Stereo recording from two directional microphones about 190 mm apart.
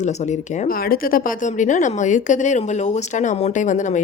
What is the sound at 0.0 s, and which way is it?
Speech, 40° left (ahead or behind).